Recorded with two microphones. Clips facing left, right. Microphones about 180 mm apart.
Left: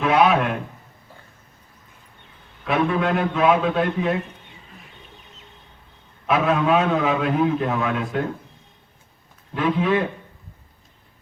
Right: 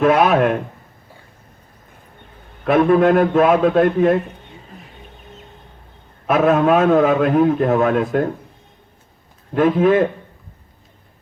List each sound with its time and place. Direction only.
0.0 s a man's voice: 50° right (ahead or behind)
2.6 s a man's voice: 50° right (ahead or behind)
6.2 s a man's voice: 50° right (ahead or behind)
9.6 s a man's voice: 50° right (ahead or behind)